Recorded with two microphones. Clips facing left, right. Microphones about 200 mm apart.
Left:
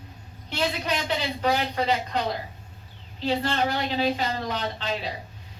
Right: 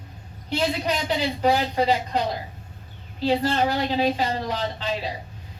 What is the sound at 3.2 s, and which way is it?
A woman's voice, 40° right (ahead or behind).